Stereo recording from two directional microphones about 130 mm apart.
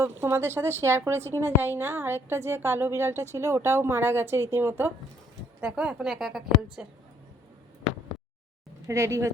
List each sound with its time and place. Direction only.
0.0 s a woman's voice: 20° right (ahead or behind)
5.5 s a woman's voice: 5° right (ahead or behind)
8.9 s a woman's voice: 20° right (ahead or behind)